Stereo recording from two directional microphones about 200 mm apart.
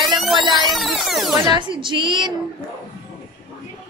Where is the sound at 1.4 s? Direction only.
25° right (ahead or behind).